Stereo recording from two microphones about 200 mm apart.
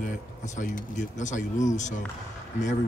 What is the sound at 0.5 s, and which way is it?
Speech, 40° left (ahead or behind).